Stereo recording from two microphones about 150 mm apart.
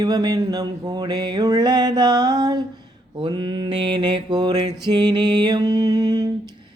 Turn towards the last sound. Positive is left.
turn(degrees=-25)  # may be behind; listen again after turning